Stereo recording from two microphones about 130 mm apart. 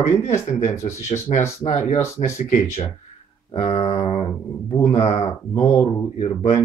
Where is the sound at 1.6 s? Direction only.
50° left (ahead or behind).